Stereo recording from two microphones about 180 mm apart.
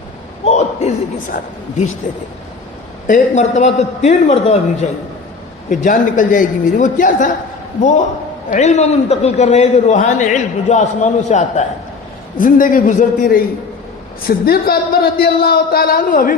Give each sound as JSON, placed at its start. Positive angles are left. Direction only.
{"t": 0.4, "sound": "speech", "side_deg": 35}
{"t": 1.3, "sound": "a man's voice", "side_deg": 55}
{"t": 3.1, "sound": "a man's voice", "side_deg": 45}